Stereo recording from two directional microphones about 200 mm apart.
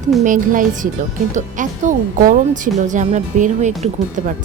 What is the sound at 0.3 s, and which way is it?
Speech, 40° right (ahead or behind).